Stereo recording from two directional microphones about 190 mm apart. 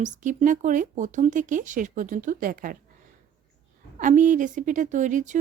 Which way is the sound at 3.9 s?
40° right (ahead or behind).